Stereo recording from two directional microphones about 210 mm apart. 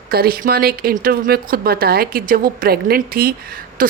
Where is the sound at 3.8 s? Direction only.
40° right (ahead or behind).